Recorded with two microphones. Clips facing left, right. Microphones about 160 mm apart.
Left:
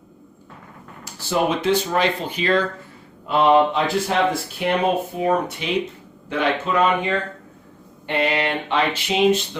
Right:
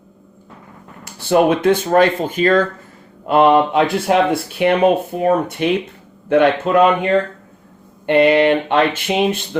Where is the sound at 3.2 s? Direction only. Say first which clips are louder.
Right 4 dB; 60° right (ahead or behind).